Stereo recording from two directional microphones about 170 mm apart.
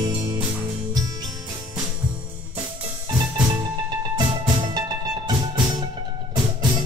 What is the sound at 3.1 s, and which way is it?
Music, 25° right (ahead or behind).